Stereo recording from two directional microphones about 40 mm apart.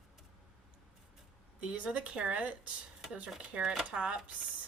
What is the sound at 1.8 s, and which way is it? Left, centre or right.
Speech, right.